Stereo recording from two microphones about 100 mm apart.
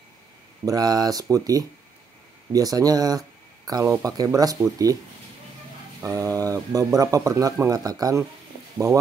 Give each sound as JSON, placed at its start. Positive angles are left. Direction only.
{"t": 0.7, "sound": "speech", "side_deg": -40}
{"t": 6.0, "sound": "speech", "side_deg": -35}